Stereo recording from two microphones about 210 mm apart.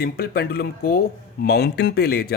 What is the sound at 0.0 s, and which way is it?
Speech, 45° left (ahead or behind).